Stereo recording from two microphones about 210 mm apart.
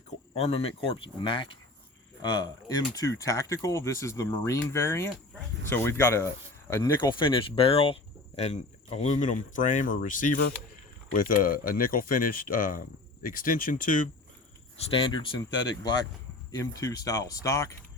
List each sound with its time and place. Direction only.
0.3 s speech: 30° left (ahead or behind)
14.8 s speech: 25° left (ahead or behind)